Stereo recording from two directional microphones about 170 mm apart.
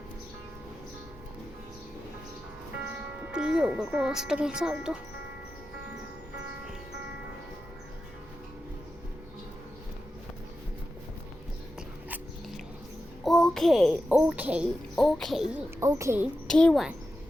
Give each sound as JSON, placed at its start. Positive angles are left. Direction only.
{"t": 3.3, "sound": "speech", "side_deg": -5}
{"t": 12.0, "sound": "dog", "side_deg": -5}
{"t": 13.2, "sound": "a sound", "side_deg": 0}
{"t": 14.1, "sound": "a woman's voice", "side_deg": -5}
{"t": 14.9, "sound": "speech", "side_deg": 0}
{"t": 15.5, "sound": "a woman's voice", "side_deg": -15}
{"t": 16.5, "sound": "speech", "side_deg": 5}